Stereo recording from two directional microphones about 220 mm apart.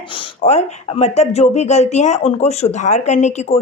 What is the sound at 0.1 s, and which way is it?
Speech, 25° left (ahead or behind).